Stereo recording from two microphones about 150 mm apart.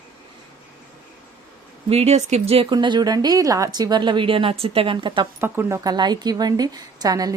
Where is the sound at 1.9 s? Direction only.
45° right (ahead or behind).